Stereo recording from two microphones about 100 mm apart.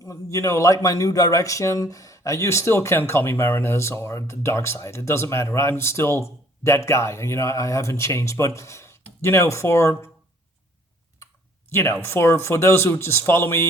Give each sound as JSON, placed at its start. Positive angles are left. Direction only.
{"t": 0.0, "sound": "speech", "side_deg": 35}
{"t": 11.7, "sound": "speech", "side_deg": 25}